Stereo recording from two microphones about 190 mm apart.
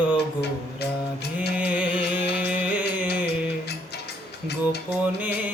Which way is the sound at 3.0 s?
60° left (ahead or behind).